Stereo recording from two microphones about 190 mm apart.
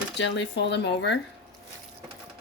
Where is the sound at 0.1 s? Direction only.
70° left (ahead or behind).